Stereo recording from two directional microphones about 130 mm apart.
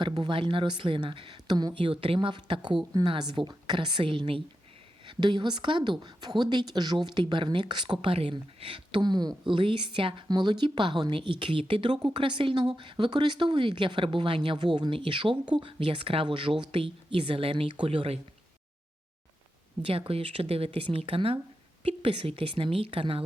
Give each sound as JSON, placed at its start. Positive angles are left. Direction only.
{"t": 0.0, "sound": "speech", "side_deg": -35}
{"t": 19.8, "sound": "speech", "side_deg": -45}